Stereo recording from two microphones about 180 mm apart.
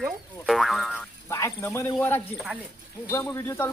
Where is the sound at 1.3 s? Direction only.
15° left (ahead or behind).